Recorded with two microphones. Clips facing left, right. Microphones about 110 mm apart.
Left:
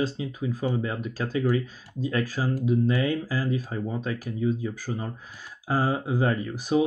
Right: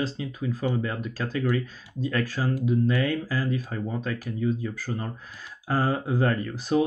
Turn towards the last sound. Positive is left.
turn(degrees=15)  # may be behind; listen again after turning